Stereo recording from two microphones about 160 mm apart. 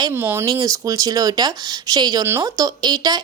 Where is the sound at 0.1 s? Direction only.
15° right (ahead or behind).